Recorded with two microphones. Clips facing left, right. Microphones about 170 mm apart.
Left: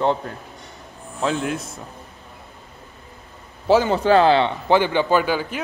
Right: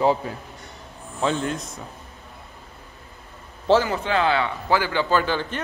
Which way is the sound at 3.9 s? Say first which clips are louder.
Left 7 dB; 35° left (ahead or behind).